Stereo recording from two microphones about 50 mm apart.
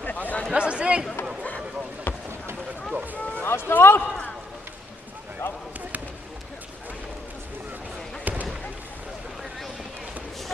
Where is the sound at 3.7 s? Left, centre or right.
Left.